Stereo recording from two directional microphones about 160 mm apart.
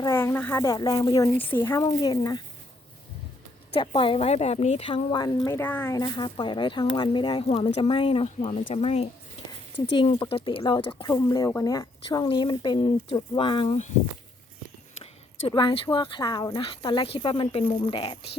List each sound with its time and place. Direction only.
0.0 s speech: 15° left (ahead or behind)
1.8 s speech: 25° left (ahead or behind)
3.7 s speech: 35° left (ahead or behind)
5.5 s speech: 15° left (ahead or behind); by 9.0 s 40° left (ahead or behind)
9.9 s speech: 30° left (ahead or behind)
11.1 s speech: 20° left (ahead or behind)
15.4 s speech: 35° left (ahead or behind)